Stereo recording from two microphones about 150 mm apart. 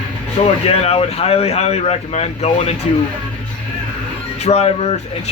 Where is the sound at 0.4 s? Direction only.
45° left (ahead or behind).